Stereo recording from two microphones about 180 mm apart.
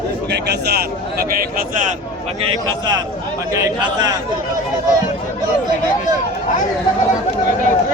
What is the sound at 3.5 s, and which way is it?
Speech, 20° right (ahead or behind).